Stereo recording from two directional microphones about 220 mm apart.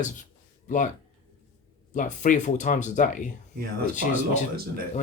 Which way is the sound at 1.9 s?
35° left (ahead or behind).